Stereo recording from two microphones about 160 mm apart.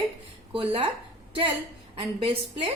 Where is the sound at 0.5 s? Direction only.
35° right (ahead or behind).